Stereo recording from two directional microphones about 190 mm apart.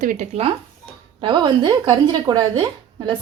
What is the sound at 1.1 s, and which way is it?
Speech, 25° right (ahead or behind).